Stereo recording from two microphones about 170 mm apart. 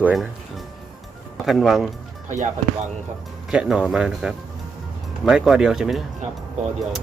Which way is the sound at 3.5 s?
5° right (ahead or behind).